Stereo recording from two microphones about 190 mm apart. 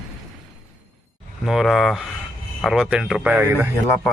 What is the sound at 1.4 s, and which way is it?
Speech, centre (ahead or behind).